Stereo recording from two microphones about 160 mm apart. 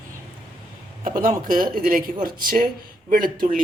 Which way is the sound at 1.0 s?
60° right (ahead or behind).